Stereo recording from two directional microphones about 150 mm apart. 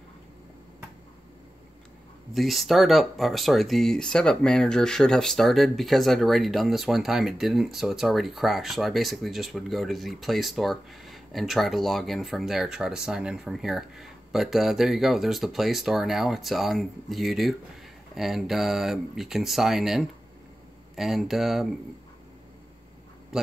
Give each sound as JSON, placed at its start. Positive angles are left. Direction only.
{"t": 2.3, "sound": "speech", "side_deg": 0}
{"t": 23.3, "sound": "a man's voice", "side_deg": -5}